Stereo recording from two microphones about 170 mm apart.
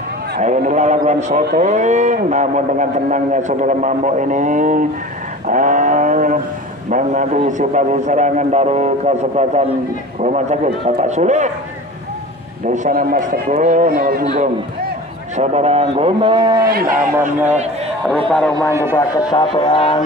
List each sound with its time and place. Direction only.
0.4 s a man's voice: 45° right (ahead or behind)
12.7 s a man's voice: 50° right (ahead or behind); by 16.6 s 25° right (ahead or behind)
18.7 s a man's voice: 15° right (ahead or behind)
18.9 s speech: 25° left (ahead or behind)